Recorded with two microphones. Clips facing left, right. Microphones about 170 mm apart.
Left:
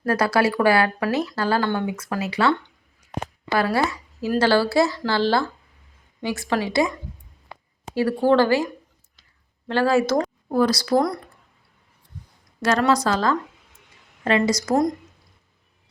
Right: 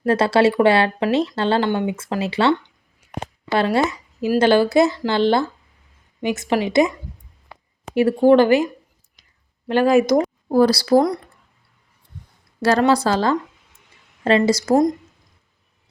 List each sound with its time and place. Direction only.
0.0 s speech: 25° right (ahead or behind)
3.0 s a sound: 25° right (ahead or behind)
3.5 s speech: 25° right (ahead or behind)
7.9 s speech: 20° right (ahead or behind)
10.5 s speech: 30° right (ahead or behind)
12.6 s a woman's voice: 30° right (ahead or behind)